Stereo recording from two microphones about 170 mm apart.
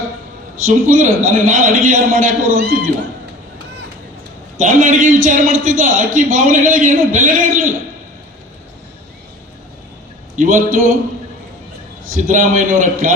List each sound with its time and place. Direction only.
0.6 s a man's voice: 50° right (ahead or behind)
4.5 s a man's voice: 50° right (ahead or behind)
10.3 s a man's voice: 50° right (ahead or behind)
12.1 s a man's voice: 50° right (ahead or behind)